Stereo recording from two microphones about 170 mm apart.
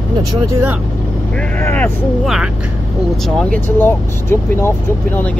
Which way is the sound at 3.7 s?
10° left (ahead or behind).